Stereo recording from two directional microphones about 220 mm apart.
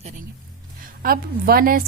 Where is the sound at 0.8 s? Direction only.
40° right (ahead or behind).